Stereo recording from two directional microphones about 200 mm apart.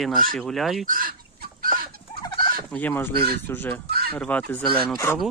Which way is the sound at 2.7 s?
10° left (ahead or behind).